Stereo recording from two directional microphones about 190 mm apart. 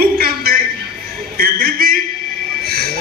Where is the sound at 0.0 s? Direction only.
55° right (ahead or behind).